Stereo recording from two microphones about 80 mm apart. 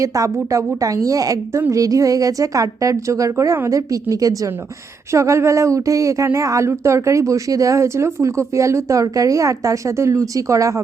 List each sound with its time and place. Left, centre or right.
0.0 s a woman's voice: right